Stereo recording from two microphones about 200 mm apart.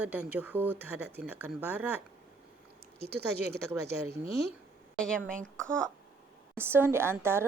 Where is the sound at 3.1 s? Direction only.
55° right (ahead or behind).